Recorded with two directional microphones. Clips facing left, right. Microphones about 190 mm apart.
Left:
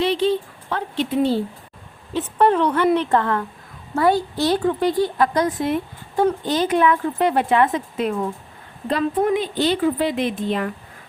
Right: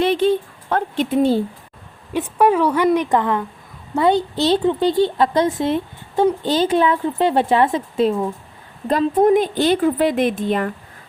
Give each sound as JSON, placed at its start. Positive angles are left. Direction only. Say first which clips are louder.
{"t": 0.0, "sound": "speech", "louder": "right 3 dB", "side_deg": -50}
{"t": 2.1, "sound": "a woman's voice", "louder": "right 2 dB", "side_deg": -10}
{"t": 8.9, "sound": "a woman's voice", "louder": "right 5 dB", "side_deg": -45}